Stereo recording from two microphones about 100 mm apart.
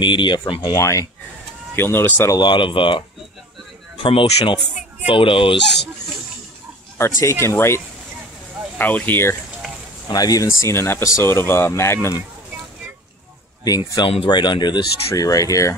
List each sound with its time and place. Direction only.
0.0 s speech: 50° left (ahead or behind)
0.7 s speech: 35° left (ahead or behind)
1.8 s speech: 20° left (ahead or behind)
2.3 s speech: 50° left (ahead or behind)
4.0 s speech: 65° left (ahead or behind)
7.0 s speech: 30° left (ahead or behind)
10.0 s speech: 40° left (ahead or behind)
13.7 s speech: 40° left (ahead or behind)
15.0 s speech: 35° left (ahead or behind)